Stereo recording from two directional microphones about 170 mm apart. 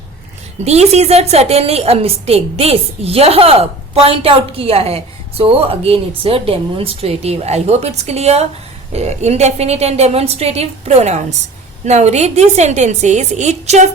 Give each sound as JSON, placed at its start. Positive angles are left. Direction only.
{"t": 0.6, "sound": "a woman's voice", "side_deg": -40}